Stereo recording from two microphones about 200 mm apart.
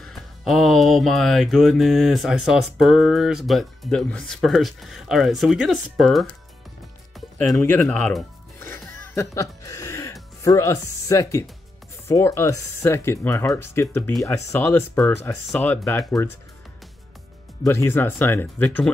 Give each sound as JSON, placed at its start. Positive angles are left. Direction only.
{"t": 0.0, "sound": "music", "side_deg": 0}
{"t": 7.2, "sound": "speech", "side_deg": 0}
{"t": 8.5, "sound": "music", "side_deg": 10}
{"t": 10.4, "sound": "speech", "side_deg": 15}
{"t": 17.6, "sound": "speech", "side_deg": 10}